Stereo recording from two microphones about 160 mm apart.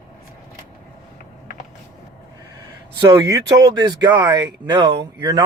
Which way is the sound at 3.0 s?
25° right (ahead or behind).